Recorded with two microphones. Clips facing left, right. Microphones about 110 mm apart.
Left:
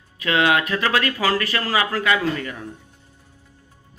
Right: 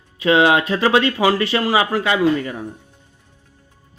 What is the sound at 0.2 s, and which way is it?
Speech, 25° right (ahead or behind).